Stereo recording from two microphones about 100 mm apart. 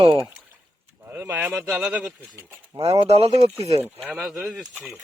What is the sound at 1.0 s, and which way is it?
Speech, 20° right (ahead or behind).